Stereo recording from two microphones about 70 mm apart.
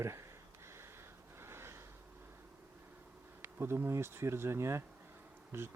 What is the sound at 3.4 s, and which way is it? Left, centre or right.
Speech, right.